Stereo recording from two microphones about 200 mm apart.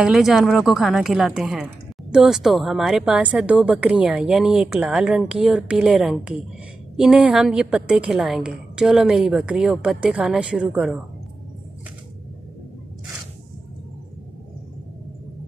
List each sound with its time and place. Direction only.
0.0 s a woman's voice: centre (ahead or behind)